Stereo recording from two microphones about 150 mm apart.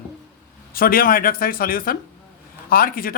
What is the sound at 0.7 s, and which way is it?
A woman's voice, 75° left (ahead or behind).